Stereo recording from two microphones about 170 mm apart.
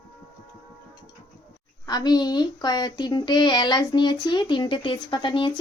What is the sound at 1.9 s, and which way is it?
Speech, 25° left (ahead or behind).